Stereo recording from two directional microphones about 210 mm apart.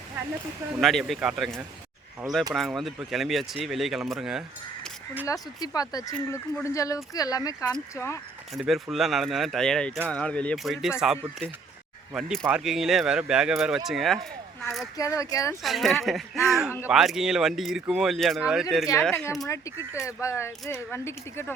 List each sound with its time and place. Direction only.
0.8 s speech: centre (ahead or behind)
5.2 s speech: 15° left (ahead or behind)
8.5 s speech: centre (ahead or behind)
14.9 s speech: 15° left (ahead or behind)
15.6 s speech: centre (ahead or behind)
19.5 s speech: 15° left (ahead or behind)